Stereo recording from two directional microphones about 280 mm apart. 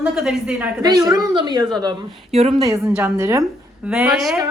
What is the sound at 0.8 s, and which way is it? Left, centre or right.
A woman's voice, centre.